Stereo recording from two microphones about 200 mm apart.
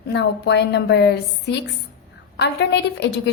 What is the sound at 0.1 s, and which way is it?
A woman's voice, 60° left (ahead or behind).